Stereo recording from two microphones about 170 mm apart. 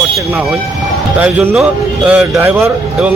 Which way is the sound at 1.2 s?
10° right (ahead or behind).